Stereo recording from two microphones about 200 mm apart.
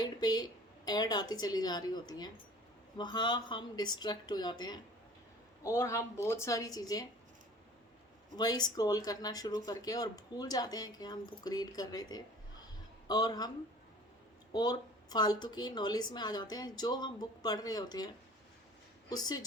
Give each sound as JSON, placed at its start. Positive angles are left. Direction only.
{"t": 0.0, "sound": "a woman's voice", "side_deg": 20}
{"t": 8.4, "sound": "speech", "side_deg": 20}
{"t": 14.5, "sound": "a woman's voice", "side_deg": 20}